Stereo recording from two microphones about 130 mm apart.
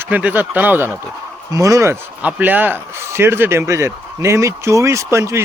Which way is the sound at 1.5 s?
25° right (ahead or behind).